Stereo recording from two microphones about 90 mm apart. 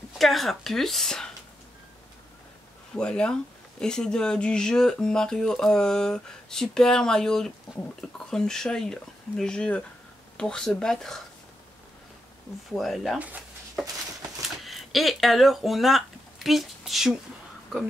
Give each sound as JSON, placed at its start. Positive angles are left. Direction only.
{"t": 0.2, "sound": "speech", "side_deg": 0}
{"t": 2.9, "sound": "speech", "side_deg": 10}
{"t": 12.7, "sound": "speech", "side_deg": 0}
{"t": 14.6, "sound": "speech", "side_deg": 0}